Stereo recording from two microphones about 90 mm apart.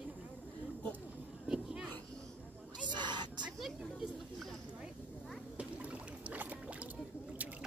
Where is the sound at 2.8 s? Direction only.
55° right (ahead or behind).